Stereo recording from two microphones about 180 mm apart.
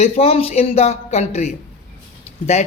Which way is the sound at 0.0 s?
35° left (ahead or behind).